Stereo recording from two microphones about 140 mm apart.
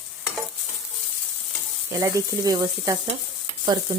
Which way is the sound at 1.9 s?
25° right (ahead or behind).